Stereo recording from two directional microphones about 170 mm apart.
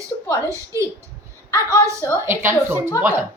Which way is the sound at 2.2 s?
15° right (ahead or behind).